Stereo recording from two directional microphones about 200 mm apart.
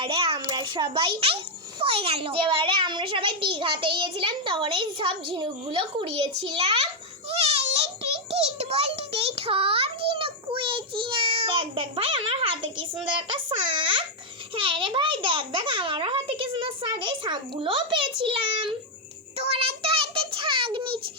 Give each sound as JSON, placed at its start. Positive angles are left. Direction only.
{"t": 0.0, "sound": "a child's voice", "side_deg": -25}
{"t": 7.3, "sound": "a sound", "side_deg": -30}
{"t": 12.8, "sound": "a child's voice", "side_deg": -25}
{"t": 19.4, "sound": "child singing", "side_deg": -30}